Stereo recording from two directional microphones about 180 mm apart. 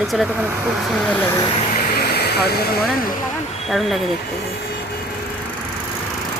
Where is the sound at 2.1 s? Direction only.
65° left (ahead or behind).